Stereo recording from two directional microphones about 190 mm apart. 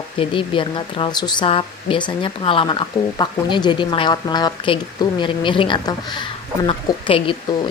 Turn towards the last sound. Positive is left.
turn(degrees=30)  # may be behind; listen again after turning